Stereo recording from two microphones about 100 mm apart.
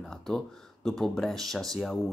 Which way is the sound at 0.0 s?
5° left (ahead or behind).